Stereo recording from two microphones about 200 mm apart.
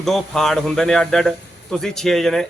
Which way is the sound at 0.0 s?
Centre (ahead or behind).